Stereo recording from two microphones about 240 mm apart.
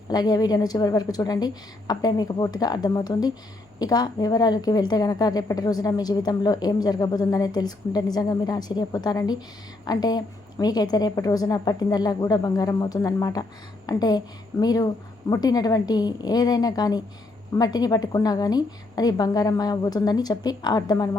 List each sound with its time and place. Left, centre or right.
0.1 s a woman's voice: centre